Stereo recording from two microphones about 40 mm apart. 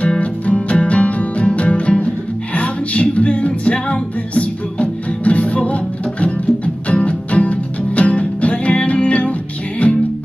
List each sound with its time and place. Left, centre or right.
0.2 s music: left